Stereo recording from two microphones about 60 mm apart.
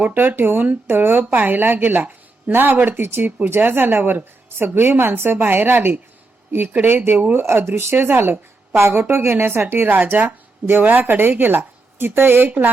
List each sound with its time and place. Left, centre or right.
0.0 s a woman's voice: right